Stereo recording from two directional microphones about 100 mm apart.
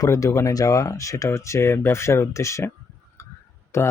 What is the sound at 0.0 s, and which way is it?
Speech, 30° left (ahead or behind).